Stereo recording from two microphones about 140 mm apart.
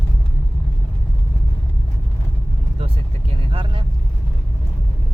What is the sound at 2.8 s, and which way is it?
Speech, 45° right (ahead or behind).